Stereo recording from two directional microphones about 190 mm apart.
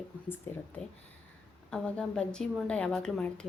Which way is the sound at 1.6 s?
5° left (ahead or behind).